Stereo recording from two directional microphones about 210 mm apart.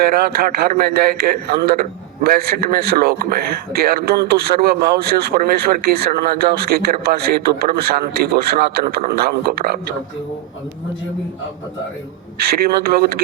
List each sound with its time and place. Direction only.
0.0 s a man's voice: 45° right (ahead or behind)
12.4 s a man's voice: 45° right (ahead or behind)